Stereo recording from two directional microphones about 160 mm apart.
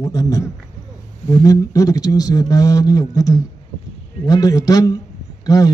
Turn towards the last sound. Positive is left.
turn(degrees=20)  # may be behind; listen again after turning